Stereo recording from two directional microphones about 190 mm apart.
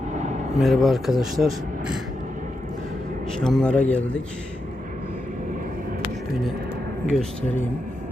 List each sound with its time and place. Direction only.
0.1 s a sound: 40° right (ahead or behind)
0.6 s speech: centre (ahead or behind)
3.4 s a man's voice: 5° left (ahead or behind)